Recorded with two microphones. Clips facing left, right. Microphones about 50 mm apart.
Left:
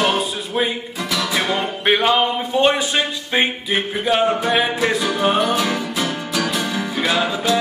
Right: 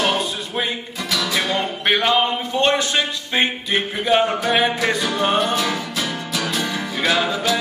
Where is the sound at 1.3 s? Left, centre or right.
Centre.